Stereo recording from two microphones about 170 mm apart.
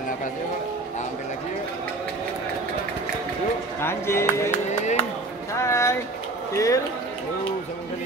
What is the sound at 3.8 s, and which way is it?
Speech, 15° left (ahead or behind).